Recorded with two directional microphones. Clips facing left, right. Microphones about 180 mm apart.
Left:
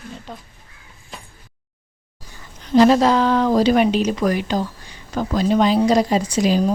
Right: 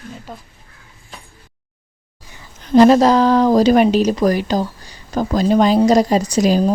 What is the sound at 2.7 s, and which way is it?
Speech, 45° right (ahead or behind).